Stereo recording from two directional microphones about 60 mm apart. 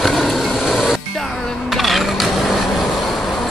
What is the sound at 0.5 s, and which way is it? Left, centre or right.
Printer, centre.